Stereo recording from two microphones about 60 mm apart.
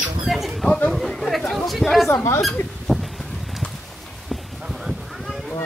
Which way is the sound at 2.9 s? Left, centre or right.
Centre.